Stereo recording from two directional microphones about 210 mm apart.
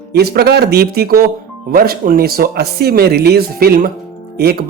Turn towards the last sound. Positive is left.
turn(degrees=-50)  # may be behind; listen again after turning